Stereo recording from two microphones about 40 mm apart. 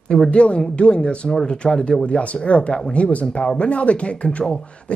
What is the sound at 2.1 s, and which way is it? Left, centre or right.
Speech, left.